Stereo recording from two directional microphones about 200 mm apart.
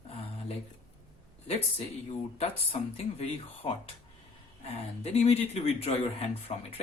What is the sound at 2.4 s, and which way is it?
Speech, 30° left (ahead or behind).